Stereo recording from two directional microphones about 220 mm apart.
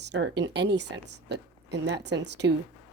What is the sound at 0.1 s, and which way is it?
A woman's voice, 50° right (ahead or behind).